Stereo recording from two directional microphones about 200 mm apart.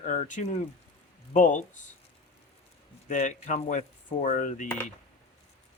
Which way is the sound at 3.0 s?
40° left (ahead or behind).